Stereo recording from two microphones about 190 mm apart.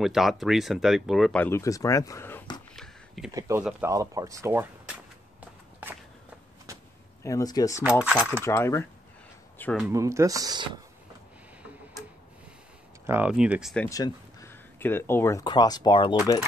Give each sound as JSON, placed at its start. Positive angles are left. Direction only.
{"t": 0.0, "sound": "speech", "side_deg": 0}
{"t": 1.4, "sound": "speech", "side_deg": 15}
{"t": 2.7, "sound": "a sound", "side_deg": 0}
{"t": 3.3, "sound": "speech", "side_deg": -15}
{"t": 7.2, "sound": "speech", "side_deg": 20}
{"t": 8.0, "sound": "speech", "side_deg": -5}
{"t": 8.5, "sound": "speech", "side_deg": 15}
{"t": 9.8, "sound": "speech", "side_deg": -10}
{"t": 13.0, "sound": "speech", "side_deg": -10}
{"t": 13.8, "sound": "speech", "side_deg": 15}